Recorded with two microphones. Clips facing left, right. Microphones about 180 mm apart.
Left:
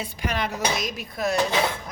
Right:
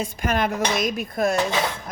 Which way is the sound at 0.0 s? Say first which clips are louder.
Right 5 dB; 45° right (ahead or behind).